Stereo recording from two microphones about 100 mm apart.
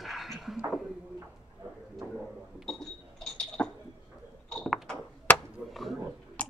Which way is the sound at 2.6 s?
5° left (ahead or behind).